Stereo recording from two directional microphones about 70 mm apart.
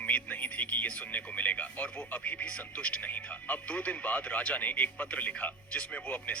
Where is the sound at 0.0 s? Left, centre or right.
Left.